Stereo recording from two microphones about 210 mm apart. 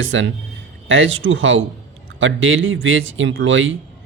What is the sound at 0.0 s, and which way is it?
Speech, 65° right (ahead or behind).